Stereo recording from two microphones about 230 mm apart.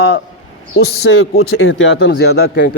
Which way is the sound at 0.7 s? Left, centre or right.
Left.